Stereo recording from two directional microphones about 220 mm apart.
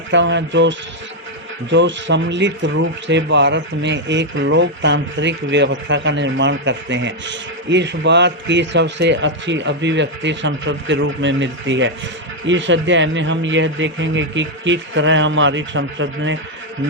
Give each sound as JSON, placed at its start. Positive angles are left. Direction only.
{"t": 0.1, "sound": "speech", "side_deg": -55}